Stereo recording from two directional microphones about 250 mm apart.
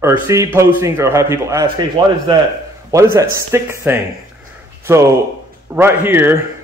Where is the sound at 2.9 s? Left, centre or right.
Centre.